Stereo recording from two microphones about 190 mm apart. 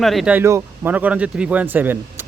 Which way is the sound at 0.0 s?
Centre (ahead or behind).